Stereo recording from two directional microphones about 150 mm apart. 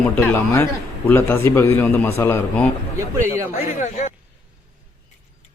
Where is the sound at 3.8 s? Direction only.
50° left (ahead or behind).